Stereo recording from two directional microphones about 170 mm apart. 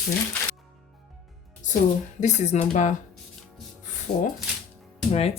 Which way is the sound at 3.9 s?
45° left (ahead or behind).